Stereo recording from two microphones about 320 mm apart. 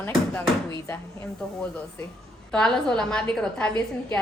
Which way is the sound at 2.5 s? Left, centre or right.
Centre.